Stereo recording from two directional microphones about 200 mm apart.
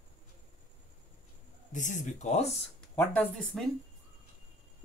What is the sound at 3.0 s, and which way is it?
Speech, 5° left (ahead or behind).